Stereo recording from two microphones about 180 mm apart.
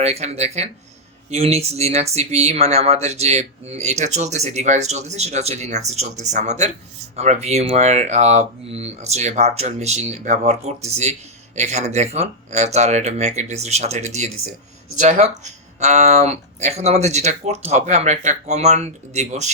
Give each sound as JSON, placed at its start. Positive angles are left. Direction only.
{"t": 0.0, "sound": "speech", "side_deg": -35}